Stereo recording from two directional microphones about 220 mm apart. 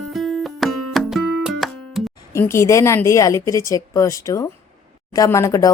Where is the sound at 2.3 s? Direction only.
10° left (ahead or behind).